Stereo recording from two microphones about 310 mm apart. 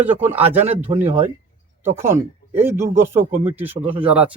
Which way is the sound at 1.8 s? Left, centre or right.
Centre.